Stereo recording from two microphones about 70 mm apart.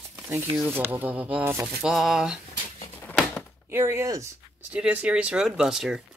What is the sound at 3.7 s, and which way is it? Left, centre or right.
Speech, right.